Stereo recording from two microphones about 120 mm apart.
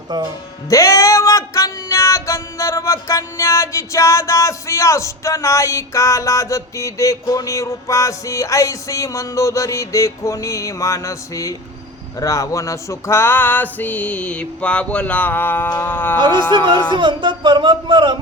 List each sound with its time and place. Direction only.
0.1 s speech: 35° right (ahead or behind)
0.7 s music: 25° left (ahead or behind)
12.2 s a sound: 25° left (ahead or behind)
16.9 s speech: 40° right (ahead or behind)